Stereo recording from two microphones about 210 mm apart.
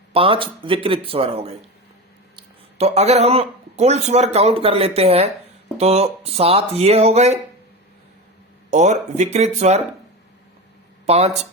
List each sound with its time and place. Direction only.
0.1 s speech: 25° right (ahead or behind)
8.7 s speech: 35° right (ahead or behind)
11.0 s speech: 30° right (ahead or behind)